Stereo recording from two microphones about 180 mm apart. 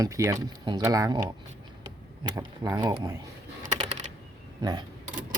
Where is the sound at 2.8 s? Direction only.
25° right (ahead or behind).